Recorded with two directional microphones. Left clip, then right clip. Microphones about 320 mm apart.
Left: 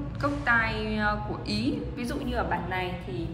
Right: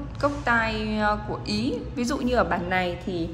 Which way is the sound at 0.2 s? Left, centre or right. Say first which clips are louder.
Right 2 dB; centre.